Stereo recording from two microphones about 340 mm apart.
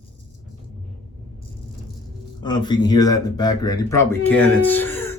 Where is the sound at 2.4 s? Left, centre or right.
Centre.